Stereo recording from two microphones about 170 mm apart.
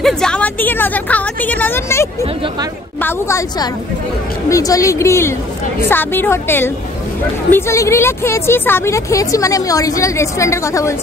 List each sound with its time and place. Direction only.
0.0 s a woman's voice: 5° left (ahead or behind)